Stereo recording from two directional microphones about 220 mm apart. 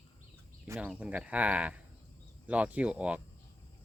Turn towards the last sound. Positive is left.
turn(degrees=-5)  # may be behind; listen again after turning